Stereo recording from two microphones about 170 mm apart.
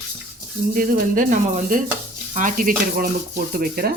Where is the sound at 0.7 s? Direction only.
55° right (ahead or behind).